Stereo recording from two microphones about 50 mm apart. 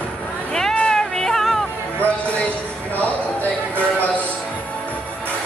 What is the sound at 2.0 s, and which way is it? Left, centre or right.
Music, left.